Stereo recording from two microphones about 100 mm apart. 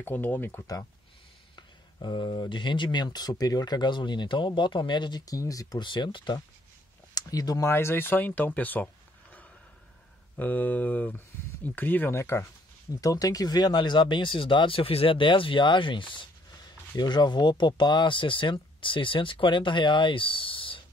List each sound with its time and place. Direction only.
0.0 s speech: 20° left (ahead or behind)
2.0 s speech: 50° left (ahead or behind)
5.8 s speech: 50° left (ahead or behind)
7.2 s speech: 40° left (ahead or behind)
7.6 s speech: 25° left (ahead or behind)
13.0 s speech: 35° left (ahead or behind); by 16.3 s 55° left (ahead or behind)
16.9 s speech: 45° left (ahead or behind); by 20.8 s 60° left (ahead or behind)